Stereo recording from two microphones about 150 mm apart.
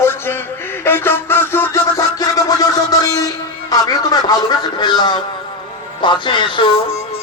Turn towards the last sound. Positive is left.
turn(degrees=35)  # may be behind; listen again after turning